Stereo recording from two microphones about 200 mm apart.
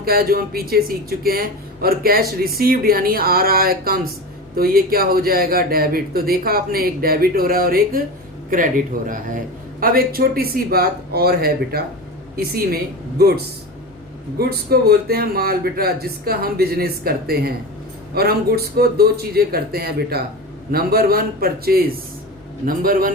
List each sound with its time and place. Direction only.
0.0 s speech: 50° right (ahead or behind)